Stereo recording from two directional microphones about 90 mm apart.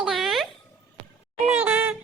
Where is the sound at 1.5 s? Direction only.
25° right (ahead or behind).